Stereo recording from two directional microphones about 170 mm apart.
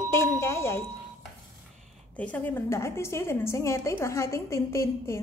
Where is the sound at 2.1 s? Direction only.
10° left (ahead or behind).